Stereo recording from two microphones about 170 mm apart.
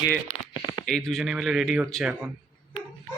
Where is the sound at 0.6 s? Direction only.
25° left (ahead or behind).